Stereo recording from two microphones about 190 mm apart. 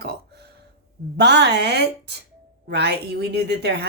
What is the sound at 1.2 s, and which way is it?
Speech, 65° right (ahead or behind).